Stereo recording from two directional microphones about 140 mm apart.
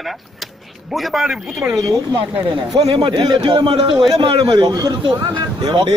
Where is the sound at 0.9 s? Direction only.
Centre (ahead or behind).